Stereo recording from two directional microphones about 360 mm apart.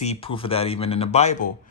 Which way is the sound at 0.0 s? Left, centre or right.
Centre.